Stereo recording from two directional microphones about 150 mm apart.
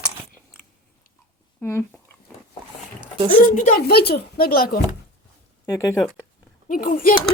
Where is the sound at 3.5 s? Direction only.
60° left (ahead or behind); by 4.8 s 85° left.